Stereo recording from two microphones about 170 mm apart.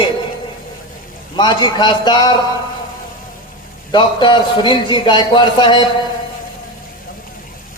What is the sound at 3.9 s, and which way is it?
A man's voice, 25° left (ahead or behind).